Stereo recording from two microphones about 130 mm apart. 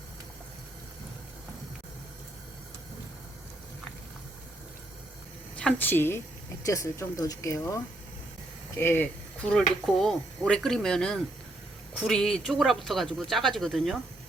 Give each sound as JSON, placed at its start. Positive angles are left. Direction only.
{"t": 5.5, "sound": "speech", "side_deg": 10}